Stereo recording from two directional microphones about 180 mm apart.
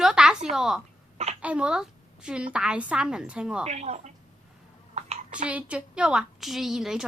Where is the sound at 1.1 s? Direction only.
35° right (ahead or behind).